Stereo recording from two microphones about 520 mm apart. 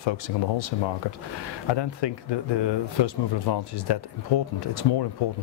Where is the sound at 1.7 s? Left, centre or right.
Left.